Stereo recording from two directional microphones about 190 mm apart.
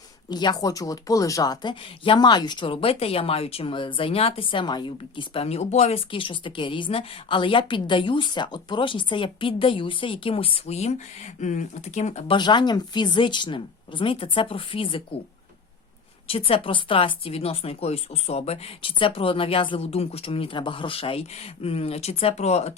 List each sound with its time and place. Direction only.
0.3 s speech: 20° left (ahead or behind)
12.4 s speech: 25° left (ahead or behind)
16.2 s speech: 30° left (ahead or behind)